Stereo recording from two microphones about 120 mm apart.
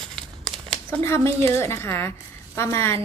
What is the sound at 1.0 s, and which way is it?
A woman's voice, 25° left (ahead or behind).